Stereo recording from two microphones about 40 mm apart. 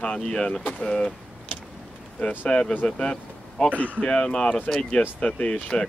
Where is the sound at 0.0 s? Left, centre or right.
Left.